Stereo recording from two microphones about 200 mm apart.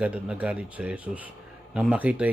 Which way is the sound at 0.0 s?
5° right (ahead or behind).